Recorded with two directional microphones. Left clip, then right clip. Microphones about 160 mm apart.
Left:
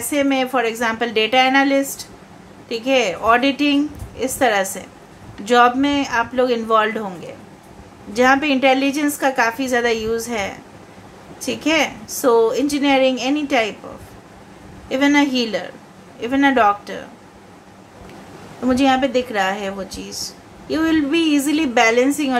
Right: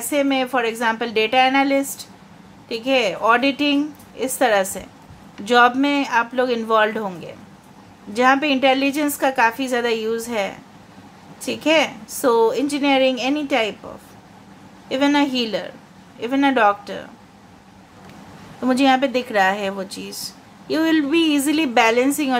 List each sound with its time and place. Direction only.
0.1 s a woman's voice: 20° right (ahead or behind)
8.1 s a woman's voice: 20° right (ahead or behind)
14.9 s a woman's voice: 20° right (ahead or behind)
18.7 s a woman's voice: 25° right (ahead or behind)